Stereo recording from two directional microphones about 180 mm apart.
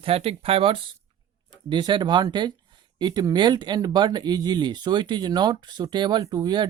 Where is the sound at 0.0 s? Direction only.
35° right (ahead or behind).